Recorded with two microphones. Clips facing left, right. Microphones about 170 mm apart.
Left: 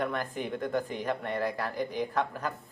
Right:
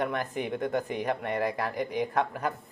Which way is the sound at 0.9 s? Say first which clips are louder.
Right 2 dB; 15° right (ahead or behind).